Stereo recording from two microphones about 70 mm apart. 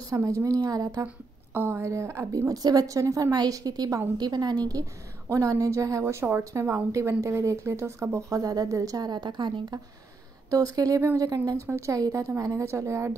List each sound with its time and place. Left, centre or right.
0.1 s a woman's voice: right
1.0 s a woman's voice: right
1.9 s speech: right
2.3 s a woman's voice: right
5.3 s speech: right
10.5 s a woman's voice: right
11.6 s speech: right